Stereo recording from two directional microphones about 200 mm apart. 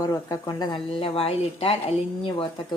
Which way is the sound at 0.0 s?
15° left (ahead or behind).